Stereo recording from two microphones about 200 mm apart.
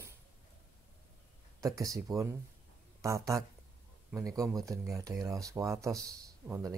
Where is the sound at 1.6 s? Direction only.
15° right (ahead or behind).